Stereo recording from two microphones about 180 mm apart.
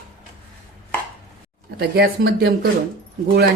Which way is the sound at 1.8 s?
60° right (ahead or behind).